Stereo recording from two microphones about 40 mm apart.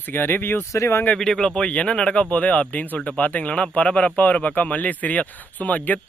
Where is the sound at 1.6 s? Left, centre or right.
Left.